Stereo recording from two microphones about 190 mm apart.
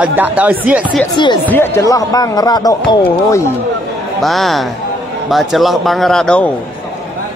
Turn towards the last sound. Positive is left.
turn(degrees=5)  # may be behind; listen again after turning